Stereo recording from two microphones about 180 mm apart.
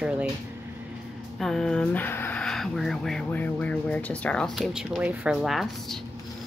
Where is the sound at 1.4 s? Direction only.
5° left (ahead or behind).